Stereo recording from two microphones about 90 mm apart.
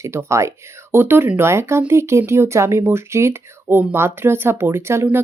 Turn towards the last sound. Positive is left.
turn(degrees=-30)  # may be behind; listen again after turning